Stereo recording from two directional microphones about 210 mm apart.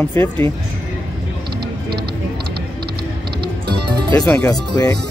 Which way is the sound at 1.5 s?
50° right (ahead or behind).